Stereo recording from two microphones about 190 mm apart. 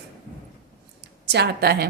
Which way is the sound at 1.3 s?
60° right (ahead or behind).